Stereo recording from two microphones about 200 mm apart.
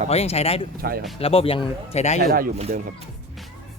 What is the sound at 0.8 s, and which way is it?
Speech, 50° right (ahead or behind).